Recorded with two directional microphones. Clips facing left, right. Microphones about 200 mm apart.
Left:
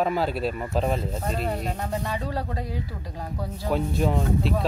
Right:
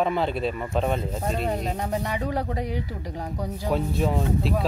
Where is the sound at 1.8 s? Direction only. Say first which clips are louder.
Right 2 dB; 15° right (ahead or behind).